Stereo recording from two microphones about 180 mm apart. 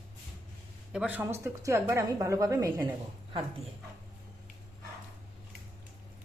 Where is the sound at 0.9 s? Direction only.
10° right (ahead or behind).